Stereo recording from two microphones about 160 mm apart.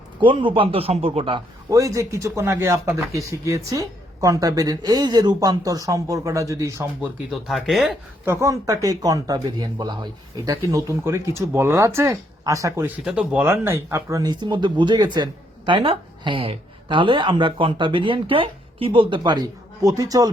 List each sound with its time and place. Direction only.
0.2 s a man's voice: 30° right (ahead or behind)
1.8 s speech: 20° right (ahead or behind)
7.3 s speech: centre (ahead or behind)
8.2 s speech: 15° right (ahead or behind)